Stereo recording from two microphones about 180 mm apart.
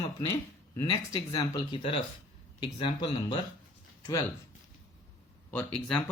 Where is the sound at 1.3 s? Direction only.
25° left (ahead or behind).